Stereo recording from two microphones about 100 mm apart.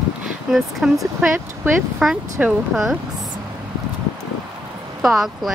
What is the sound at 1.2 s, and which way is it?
Speech, 20° right (ahead or behind).